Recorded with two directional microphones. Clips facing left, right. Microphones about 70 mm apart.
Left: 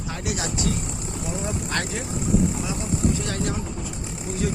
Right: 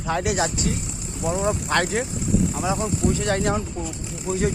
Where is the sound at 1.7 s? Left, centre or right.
Right.